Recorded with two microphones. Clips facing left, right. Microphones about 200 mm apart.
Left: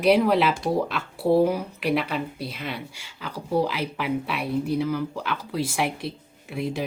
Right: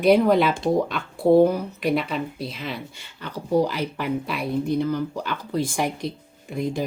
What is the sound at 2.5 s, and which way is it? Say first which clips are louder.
Speech: right 1 dB; 60° left (ahead or behind).